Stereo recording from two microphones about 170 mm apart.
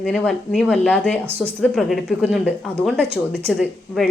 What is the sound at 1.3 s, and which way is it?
Speech, 15° right (ahead or behind).